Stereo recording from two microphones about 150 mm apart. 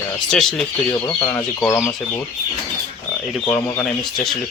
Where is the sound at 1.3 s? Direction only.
20° left (ahead or behind).